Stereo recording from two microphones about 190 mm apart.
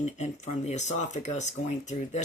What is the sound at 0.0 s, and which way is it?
Speech, 35° left (ahead or behind).